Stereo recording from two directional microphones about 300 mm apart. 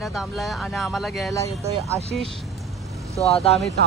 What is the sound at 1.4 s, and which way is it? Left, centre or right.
Speech, right.